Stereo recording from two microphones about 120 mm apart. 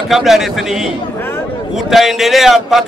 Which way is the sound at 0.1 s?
Centre (ahead or behind).